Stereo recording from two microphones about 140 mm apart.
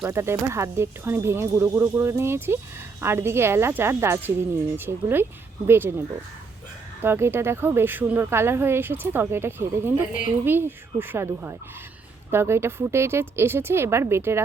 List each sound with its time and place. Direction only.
0.0 s a woman's voice: 20° right (ahead or behind)
7.0 s a woman's voice: 15° right (ahead or behind)